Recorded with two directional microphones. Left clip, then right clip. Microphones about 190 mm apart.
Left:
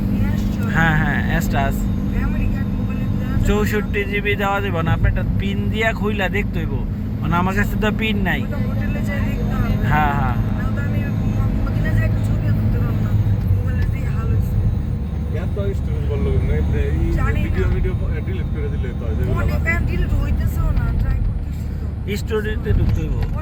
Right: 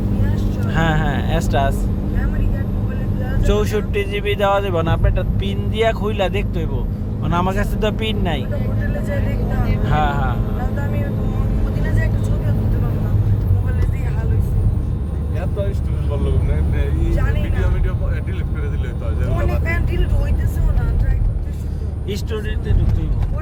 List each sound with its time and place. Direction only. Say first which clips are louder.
0.7 s vehicle: left 2 dB; 10° right (ahead or behind)
3.4 s speech: right 1 dB; 15° right (ahead or behind)
9.9 s speech: left 1 dB; centre (ahead or behind)
22.1 s speech: left 4 dB; centre (ahead or behind)